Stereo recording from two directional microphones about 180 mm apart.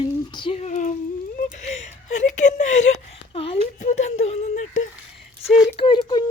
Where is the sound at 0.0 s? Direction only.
25° left (ahead or behind).